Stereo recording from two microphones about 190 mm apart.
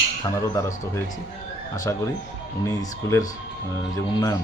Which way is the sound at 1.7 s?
20° left (ahead or behind).